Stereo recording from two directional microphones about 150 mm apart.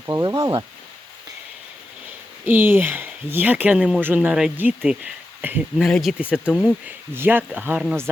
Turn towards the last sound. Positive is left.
turn(degrees=-10)  # may be behind; listen again after turning